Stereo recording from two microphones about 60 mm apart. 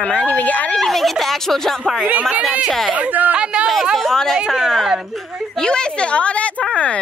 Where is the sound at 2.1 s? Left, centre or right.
Right.